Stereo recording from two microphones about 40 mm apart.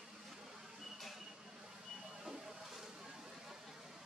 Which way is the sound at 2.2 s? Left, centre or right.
Centre.